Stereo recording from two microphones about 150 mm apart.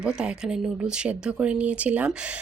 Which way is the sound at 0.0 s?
5° right (ahead or behind).